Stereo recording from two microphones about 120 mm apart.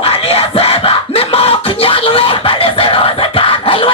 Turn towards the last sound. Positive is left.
turn(degrees=50)  # may be behind; listen again after turning